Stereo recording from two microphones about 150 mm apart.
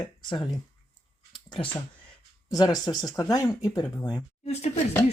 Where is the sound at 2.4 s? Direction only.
25° left (ahead or behind).